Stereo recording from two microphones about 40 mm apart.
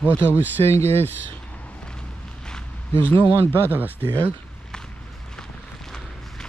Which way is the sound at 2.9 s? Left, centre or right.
Left.